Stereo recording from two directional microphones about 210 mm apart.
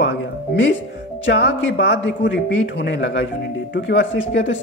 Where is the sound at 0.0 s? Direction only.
55° left (ahead or behind).